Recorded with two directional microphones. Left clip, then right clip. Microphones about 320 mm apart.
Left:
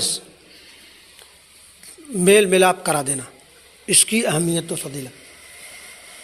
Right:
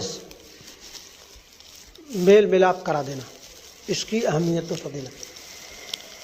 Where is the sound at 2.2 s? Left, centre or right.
Left.